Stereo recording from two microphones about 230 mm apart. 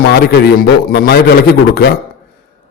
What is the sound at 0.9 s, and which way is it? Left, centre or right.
Speech, left.